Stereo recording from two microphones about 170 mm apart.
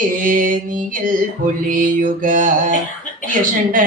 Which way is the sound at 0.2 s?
50° right (ahead or behind).